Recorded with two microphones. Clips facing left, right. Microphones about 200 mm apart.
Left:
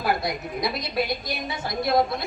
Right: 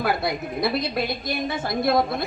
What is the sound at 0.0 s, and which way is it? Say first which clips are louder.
A woman's voice: right 2 dB; 55° right (ahead or behind).